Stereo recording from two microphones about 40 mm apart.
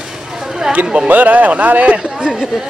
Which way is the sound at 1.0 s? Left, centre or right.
Right.